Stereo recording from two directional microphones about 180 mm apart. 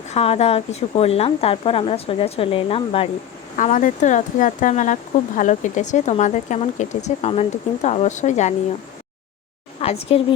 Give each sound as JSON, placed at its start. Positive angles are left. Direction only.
{"t": 0.1, "sound": "speech", "side_deg": 35}
{"t": 3.6, "sound": "speech", "side_deg": 45}
{"t": 9.8, "sound": "a sound", "side_deg": 35}